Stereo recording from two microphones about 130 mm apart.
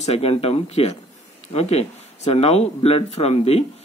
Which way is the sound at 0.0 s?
50° left (ahead or behind).